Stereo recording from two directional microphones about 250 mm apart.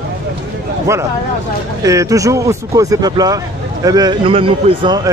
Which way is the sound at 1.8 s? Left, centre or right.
Centre.